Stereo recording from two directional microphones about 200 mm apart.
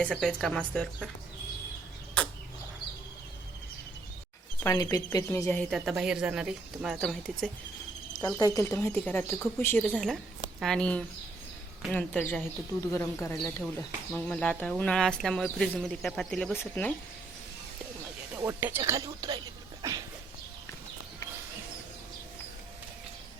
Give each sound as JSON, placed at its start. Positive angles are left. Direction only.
{"t": 0.0, "sound": "speech", "side_deg": 5}
{"t": 4.6, "sound": "speech", "side_deg": 15}
{"t": 5.7, "sound": "speech", "side_deg": -5}
{"t": 8.4, "sound": "speech", "side_deg": 15}
{"t": 18.3, "sound": "speech", "side_deg": -15}
{"t": 19.8, "sound": "a sound", "side_deg": -20}